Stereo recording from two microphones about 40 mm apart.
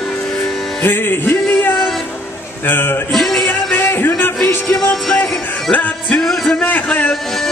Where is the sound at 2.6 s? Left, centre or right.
Left.